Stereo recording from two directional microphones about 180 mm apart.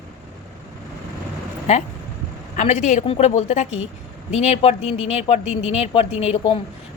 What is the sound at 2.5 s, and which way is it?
Speech, 40° left (ahead or behind).